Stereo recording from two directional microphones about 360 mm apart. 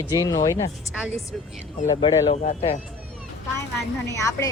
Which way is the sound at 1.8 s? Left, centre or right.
Centre.